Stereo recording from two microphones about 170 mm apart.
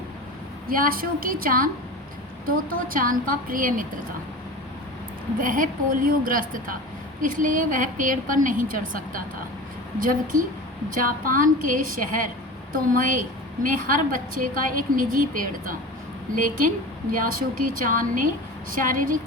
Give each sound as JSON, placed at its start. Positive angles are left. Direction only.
{"t": 0.7, "sound": "a woman's voice", "side_deg": -55}
{"t": 5.4, "sound": "a woman's voice", "side_deg": -55}